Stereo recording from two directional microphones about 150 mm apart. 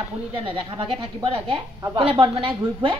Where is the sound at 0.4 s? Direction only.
35° right (ahead or behind).